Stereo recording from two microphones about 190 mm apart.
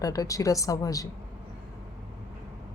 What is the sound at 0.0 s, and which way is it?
A woman's voice, 20° left (ahead or behind).